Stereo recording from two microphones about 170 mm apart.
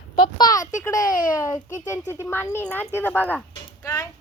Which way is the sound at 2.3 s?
15° left (ahead or behind).